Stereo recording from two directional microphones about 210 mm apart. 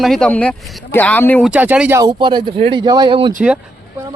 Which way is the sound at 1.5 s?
5° right (ahead or behind).